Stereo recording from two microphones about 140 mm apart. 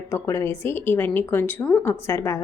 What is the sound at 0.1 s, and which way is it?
A woman's voice, 20° left (ahead or behind).